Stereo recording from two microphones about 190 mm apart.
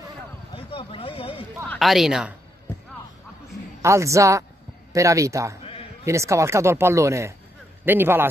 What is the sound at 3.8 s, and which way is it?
A man's voice, 15° right (ahead or behind).